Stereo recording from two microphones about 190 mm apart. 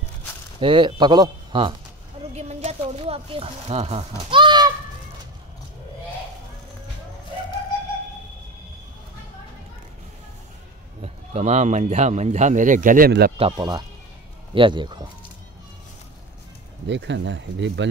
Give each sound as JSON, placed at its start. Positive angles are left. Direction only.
{"t": 0.6, "sound": "speech", "side_deg": -25}
{"t": 2.3, "sound": "speech", "side_deg": -35}
{"t": 11.0, "sound": "speech", "side_deg": -35}
{"t": 13.4, "sound": "speech", "side_deg": -25}
{"t": 16.8, "sound": "speech", "side_deg": -70}